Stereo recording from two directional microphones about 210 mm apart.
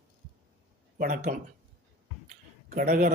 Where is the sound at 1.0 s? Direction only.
40° right (ahead or behind).